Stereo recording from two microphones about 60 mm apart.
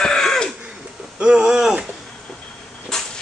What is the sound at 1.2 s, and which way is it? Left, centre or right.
Speech, centre.